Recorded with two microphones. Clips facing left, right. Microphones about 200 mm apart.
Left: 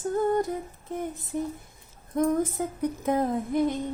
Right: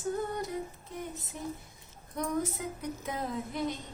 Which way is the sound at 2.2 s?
50° left (ahead or behind).